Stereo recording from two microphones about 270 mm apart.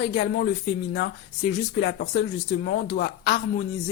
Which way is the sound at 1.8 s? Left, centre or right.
Left.